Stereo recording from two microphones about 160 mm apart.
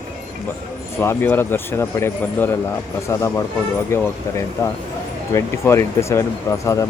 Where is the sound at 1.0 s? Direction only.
15° left (ahead or behind).